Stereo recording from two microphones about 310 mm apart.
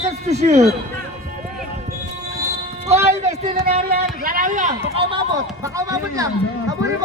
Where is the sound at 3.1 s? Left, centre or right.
Right.